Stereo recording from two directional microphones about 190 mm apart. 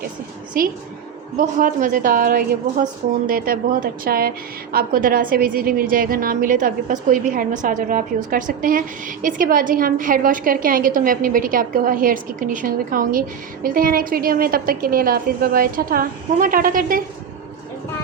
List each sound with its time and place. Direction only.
0.6 s a woman's voice: 45° right (ahead or behind)